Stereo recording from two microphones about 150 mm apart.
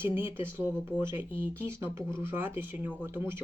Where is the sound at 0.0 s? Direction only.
15° right (ahead or behind).